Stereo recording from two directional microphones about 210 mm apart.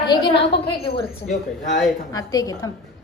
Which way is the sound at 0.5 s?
50° left (ahead or behind).